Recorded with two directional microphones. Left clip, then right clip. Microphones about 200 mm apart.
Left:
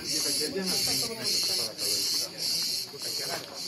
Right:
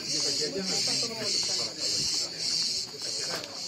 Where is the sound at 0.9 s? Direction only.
50° left (ahead or behind).